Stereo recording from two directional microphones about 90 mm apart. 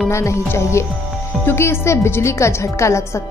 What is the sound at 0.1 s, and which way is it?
A woman's voice, 30° left (ahead or behind).